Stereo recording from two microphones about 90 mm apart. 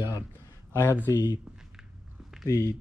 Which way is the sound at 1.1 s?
50° left (ahead or behind).